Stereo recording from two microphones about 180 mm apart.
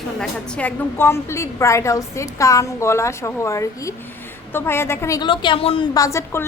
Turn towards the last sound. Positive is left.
turn(degrees=15)  # may be behind; listen again after turning